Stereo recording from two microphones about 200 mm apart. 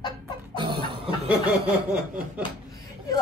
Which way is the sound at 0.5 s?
25° right (ahead or behind).